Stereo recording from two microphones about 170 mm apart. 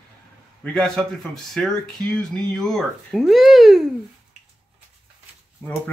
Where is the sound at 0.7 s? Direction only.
5° left (ahead or behind).